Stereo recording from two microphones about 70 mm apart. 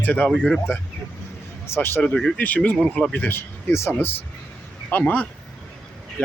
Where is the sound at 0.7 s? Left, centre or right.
Left.